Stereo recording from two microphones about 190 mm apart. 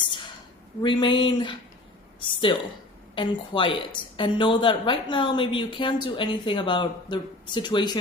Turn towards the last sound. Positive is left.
turn(degrees=20)  # may be behind; listen again after turning